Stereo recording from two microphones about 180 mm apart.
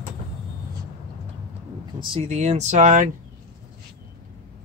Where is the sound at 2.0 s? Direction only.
35° right (ahead or behind).